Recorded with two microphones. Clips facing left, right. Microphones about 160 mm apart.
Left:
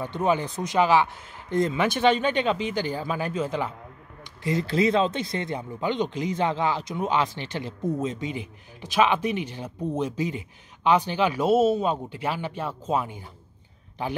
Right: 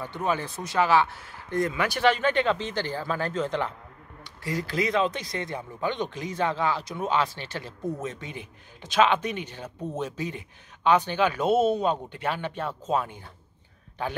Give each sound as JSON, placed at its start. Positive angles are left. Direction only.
{"t": 0.0, "sound": "speech", "side_deg": 20}
{"t": 4.2, "sound": "speech", "side_deg": 20}